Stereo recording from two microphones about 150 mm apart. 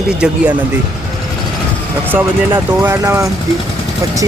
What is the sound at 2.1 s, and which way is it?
Speech, 15° right (ahead or behind).